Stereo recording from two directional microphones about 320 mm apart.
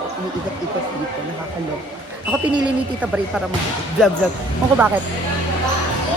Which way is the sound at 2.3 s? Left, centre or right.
Centre.